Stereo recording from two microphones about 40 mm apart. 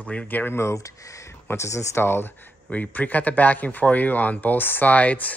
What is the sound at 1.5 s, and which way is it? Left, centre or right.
Speech, left.